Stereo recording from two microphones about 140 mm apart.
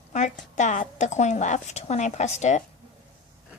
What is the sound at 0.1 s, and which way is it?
Speech, 60° left (ahead or behind).